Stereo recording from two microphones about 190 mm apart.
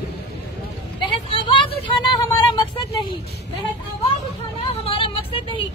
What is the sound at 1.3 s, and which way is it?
Vehicle, 25° left (ahead or behind).